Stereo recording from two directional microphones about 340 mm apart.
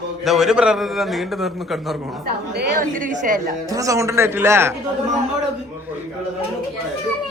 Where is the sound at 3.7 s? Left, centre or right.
Centre.